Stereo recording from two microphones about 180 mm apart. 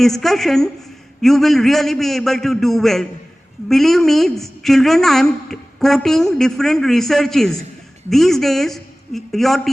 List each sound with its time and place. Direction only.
0.0 s a woman's voice: centre (ahead or behind)